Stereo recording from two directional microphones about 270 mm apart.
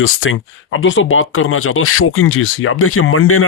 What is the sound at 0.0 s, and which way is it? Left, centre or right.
Speech, left.